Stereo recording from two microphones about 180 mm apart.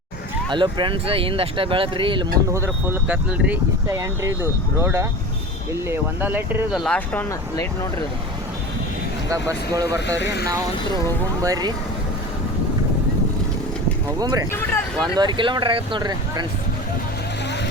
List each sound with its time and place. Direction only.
0.5 s speech: 25° right (ahead or behind)
2.5 s speech: 15° right (ahead or behind); by 7.3 s 5° left (ahead or behind)
7.5 s speech: 20° left (ahead or behind)
9.3 s speech: 20° right (ahead or behind)
10.1 s speech: 75° left (ahead or behind)
11.4 s speech: 20° right (ahead or behind)
14.2 s speech: 20° right (ahead or behind)
14.5 s speech: 10° left (ahead or behind)
15.1 s speech: 25° right (ahead or behind)